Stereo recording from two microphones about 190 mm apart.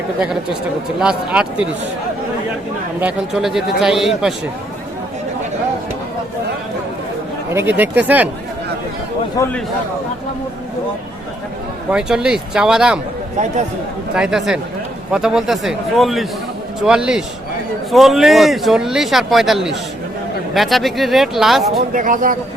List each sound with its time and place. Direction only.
0.9 s speech: 5° right (ahead or behind)
3.0 s speech: centre (ahead or behind)
7.5 s speech: 10° right (ahead or behind)
9.4 s a man's voice: 5° left (ahead or behind)
11.9 s speech: 5° right (ahead or behind)
14.2 s speech: 5° right (ahead or behind)
21.7 s speech: 50° right (ahead or behind)